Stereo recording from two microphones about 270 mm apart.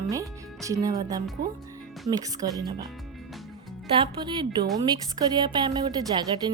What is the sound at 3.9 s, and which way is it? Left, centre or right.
Speech, centre.